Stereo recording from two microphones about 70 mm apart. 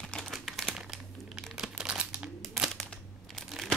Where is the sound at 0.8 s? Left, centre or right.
Centre.